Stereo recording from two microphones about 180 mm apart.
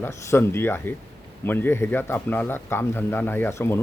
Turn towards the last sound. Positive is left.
turn(degrees=10)  # may be behind; listen again after turning